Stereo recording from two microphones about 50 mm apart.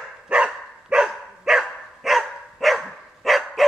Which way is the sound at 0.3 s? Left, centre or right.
Right.